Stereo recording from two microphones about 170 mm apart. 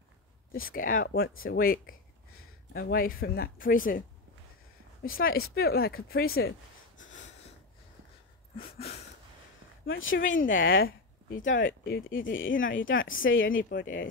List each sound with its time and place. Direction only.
0.5 s speech: 55° left (ahead or behind)
5.0 s speech: 60° left (ahead or behind)
8.5 s a sound: 35° left (ahead or behind)
10.1 s speech: 55° left (ahead or behind)
13.2 s speech: 90° left
13.6 s speech: 55° left (ahead or behind)